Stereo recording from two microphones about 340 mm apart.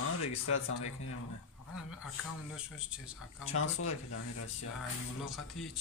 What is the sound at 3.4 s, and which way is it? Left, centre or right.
Speech, left.